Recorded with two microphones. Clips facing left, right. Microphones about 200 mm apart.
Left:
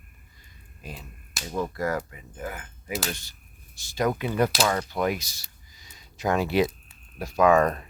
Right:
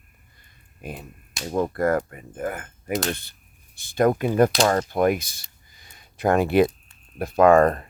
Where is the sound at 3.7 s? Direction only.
55° right (ahead or behind).